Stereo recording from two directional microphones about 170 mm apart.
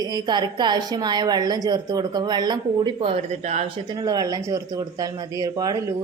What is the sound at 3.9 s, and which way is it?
A woman's voice, 20° right (ahead or behind).